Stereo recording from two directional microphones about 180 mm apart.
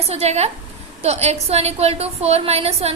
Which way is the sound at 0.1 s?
35° right (ahead or behind).